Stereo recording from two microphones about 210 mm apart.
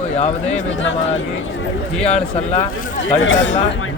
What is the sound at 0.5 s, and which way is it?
Speech, 60° left (ahead or behind).